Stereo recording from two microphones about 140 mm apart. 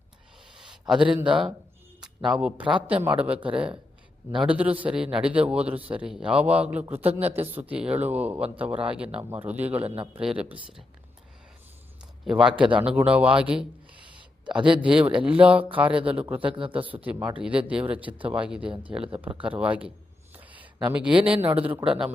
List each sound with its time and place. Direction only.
0.7 s a sound: 5° right (ahead or behind)
1.2 s speech: 35° right (ahead or behind)
2.0 s a man's voice: 5° right (ahead or behind)
7.0 s a woman's voice: 45° right (ahead or behind)
7.5 s a man's voice: 10° right (ahead or behind)
9.8 s a woman's voice: 45° right (ahead or behind)
10.1 s a man's voice: 5° right (ahead or behind)
12.2 s a man's voice: 5° right (ahead or behind)
16.6 s speech: 35° right (ahead or behind)
16.8 s a man's voice: 10° right (ahead or behind)
20.3 s a sound: 10° right (ahead or behind)
20.8 s a man's voice: 10° right (ahead or behind)
21.5 s a woman's voice: 45° right (ahead or behind)
21.8 s speech: 5° right (ahead or behind)